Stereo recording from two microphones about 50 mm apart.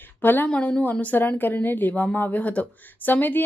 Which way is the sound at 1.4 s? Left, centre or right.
Left.